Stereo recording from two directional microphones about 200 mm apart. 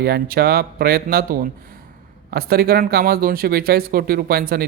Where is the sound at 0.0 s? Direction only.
50° right (ahead or behind).